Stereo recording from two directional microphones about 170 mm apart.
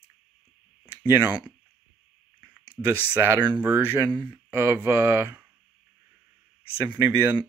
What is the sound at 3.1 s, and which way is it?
Speech, 15° right (ahead or behind).